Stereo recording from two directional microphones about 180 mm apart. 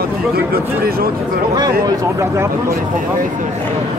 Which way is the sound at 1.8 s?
20° right (ahead or behind).